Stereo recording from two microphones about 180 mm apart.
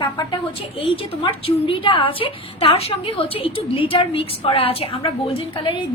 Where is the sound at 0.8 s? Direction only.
30° left (ahead or behind).